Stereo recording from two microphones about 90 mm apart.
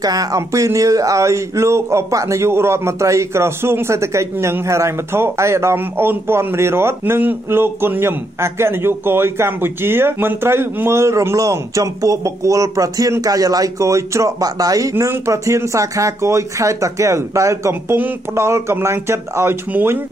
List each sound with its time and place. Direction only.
0.0 s speech: 45° right (ahead or behind); by 20.0 s 25° right (ahead or behind)